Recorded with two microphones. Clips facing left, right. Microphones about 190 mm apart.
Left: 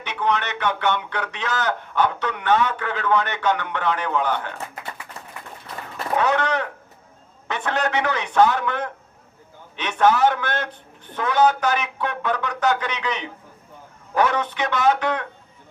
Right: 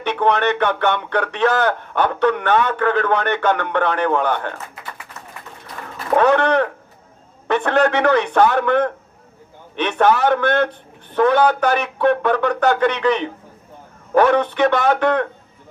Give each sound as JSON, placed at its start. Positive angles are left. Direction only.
{"t": 0.0, "sound": "a man's voice", "side_deg": -60}
{"t": 6.1, "sound": "a man's voice", "side_deg": -60}